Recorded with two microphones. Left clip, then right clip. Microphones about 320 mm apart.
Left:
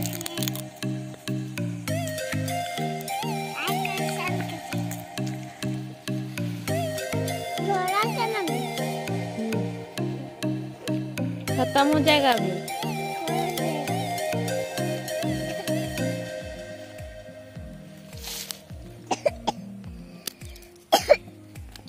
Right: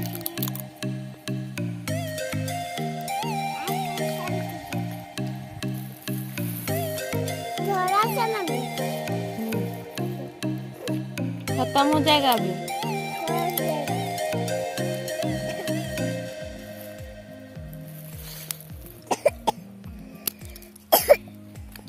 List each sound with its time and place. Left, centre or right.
0.7 s music: centre
8.2 s music: right
8.5 s music: centre
19.0 s cough: right
20.9 s cough: right